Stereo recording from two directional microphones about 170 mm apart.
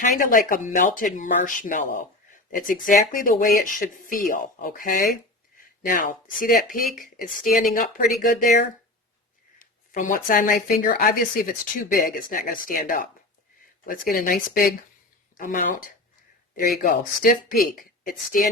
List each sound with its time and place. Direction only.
0.0 s speech: 50° left (ahead or behind)
9.6 s speech: 50° left (ahead or behind)